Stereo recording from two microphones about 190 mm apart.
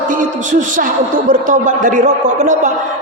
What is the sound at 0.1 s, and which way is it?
A woman's voice, 40° right (ahead or behind).